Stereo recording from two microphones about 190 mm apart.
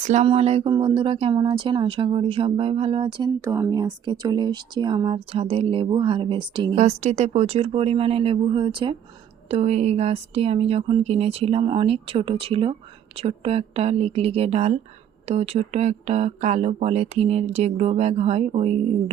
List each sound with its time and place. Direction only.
0.0 s speech: 40° right (ahead or behind)
6.7 s speech: 35° right (ahead or behind)